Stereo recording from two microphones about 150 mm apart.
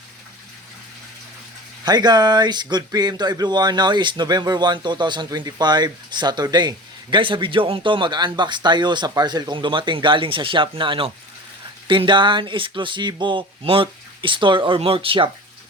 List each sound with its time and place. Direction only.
1.8 s speech: 30° right (ahead or behind)